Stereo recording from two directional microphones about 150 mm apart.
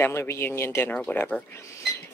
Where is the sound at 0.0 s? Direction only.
15° left (ahead or behind).